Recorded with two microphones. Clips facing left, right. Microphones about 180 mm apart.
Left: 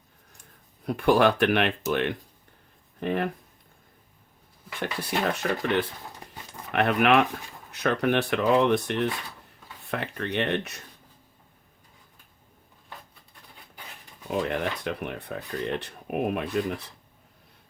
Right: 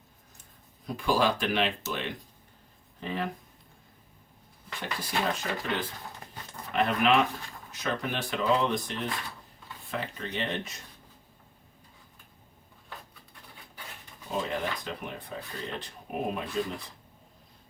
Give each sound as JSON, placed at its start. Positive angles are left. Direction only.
{"t": 0.9, "sound": "speech", "side_deg": 65}
{"t": 4.8, "sound": "speech", "side_deg": 65}
{"t": 14.3, "sound": "speech", "side_deg": 65}